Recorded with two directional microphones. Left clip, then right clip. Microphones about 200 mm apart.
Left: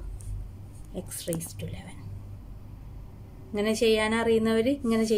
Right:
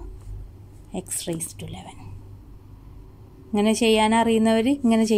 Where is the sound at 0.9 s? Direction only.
35° right (ahead or behind).